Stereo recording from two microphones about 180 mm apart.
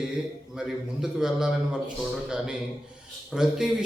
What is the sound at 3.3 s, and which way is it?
Speech, 5° right (ahead or behind).